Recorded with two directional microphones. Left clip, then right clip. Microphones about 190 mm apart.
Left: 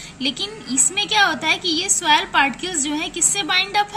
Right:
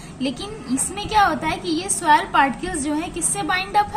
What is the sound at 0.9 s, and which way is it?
A woman's voice, 20° left (ahead or behind).